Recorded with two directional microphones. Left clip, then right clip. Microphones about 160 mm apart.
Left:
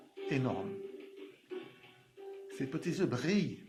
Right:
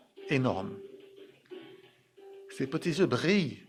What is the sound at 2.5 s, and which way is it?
Speech, 65° right (ahead or behind).